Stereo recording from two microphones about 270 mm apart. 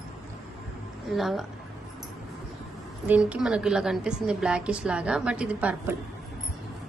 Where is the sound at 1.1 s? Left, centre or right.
Centre.